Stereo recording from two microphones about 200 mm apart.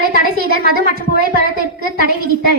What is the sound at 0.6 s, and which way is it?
Speech, 50° right (ahead or behind).